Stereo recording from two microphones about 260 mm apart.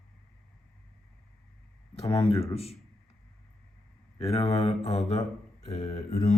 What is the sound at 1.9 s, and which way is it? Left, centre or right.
Speech, left.